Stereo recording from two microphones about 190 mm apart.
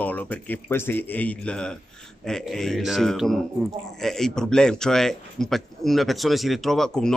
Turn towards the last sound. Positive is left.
turn(degrees=5)  # may be behind; listen again after turning